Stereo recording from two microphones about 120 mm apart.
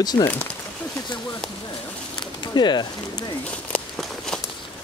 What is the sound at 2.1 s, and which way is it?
Pigeon, 40° left (ahead or behind).